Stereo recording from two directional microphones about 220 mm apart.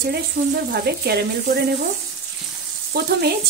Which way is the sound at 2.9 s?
50° right (ahead or behind).